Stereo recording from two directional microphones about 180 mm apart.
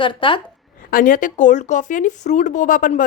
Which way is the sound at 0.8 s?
50° left (ahead or behind).